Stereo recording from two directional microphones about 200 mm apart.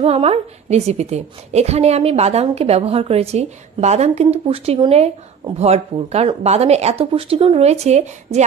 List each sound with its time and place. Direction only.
0.0 s a woman's voice: 30° right (ahead or behind)